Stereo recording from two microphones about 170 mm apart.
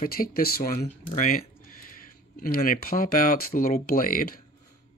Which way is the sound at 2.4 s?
55° left (ahead or behind).